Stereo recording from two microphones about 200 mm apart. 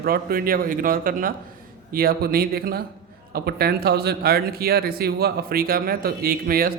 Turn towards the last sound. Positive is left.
turn(degrees=-45)  # may be behind; listen again after turning